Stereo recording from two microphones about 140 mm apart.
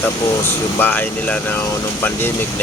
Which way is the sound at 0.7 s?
15° left (ahead or behind).